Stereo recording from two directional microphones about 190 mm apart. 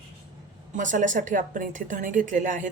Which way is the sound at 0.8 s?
40° right (ahead or behind).